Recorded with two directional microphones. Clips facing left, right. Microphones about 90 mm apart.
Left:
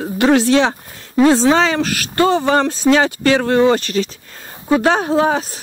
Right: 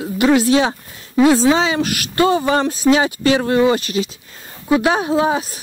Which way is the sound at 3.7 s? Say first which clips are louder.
Left 2 dB; 40° left (ahead or behind).